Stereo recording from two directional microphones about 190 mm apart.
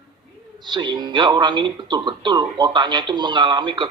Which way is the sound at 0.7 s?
20° right (ahead or behind).